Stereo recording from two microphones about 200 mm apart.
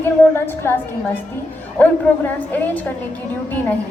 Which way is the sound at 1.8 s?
10° left (ahead or behind).